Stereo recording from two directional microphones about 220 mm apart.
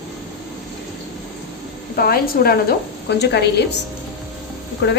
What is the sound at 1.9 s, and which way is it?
A woman's voice, 45° left (ahead or behind).